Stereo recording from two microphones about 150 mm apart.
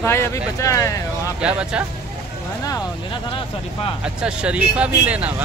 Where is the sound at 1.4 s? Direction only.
5° right (ahead or behind).